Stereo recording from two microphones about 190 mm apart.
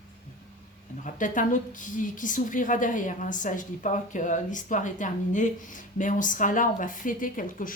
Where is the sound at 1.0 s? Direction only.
45° left (ahead or behind).